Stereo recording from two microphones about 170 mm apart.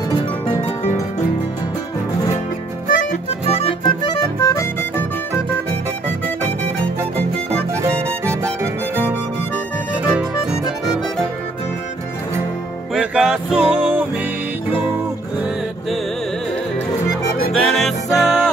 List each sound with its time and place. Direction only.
0.5 s harp: 35° left (ahead or behind)
3.0 s music: 40° left (ahead or behind)
4.4 s music: 20° left (ahead or behind)
7.8 s music: 15° right (ahead or behind)
12.9 s music: 5° right (ahead or behind)
17.5 s music: centre (ahead or behind)